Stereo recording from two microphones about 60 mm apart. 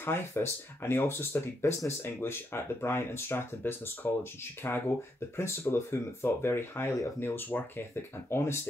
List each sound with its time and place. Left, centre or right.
0.0 s speech: left
7.2 s speech: left
8.3 s speech: left